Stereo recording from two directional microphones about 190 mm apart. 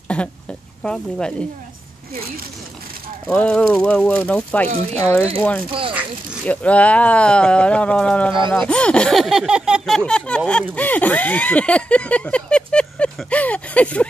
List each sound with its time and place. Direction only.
0.1 s speech: 5° left (ahead or behind)
3.3 s speech: 5° left (ahead or behind)
5.7 s speech: 30° right (ahead or behind)
6.4 s speech: 5° left (ahead or behind)
8.3 s speech: 25° right (ahead or behind)
8.5 s speech: 5° left (ahead or behind)